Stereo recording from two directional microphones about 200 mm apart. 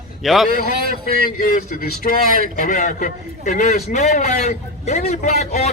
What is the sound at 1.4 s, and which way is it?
Speech, 45° left (ahead or behind).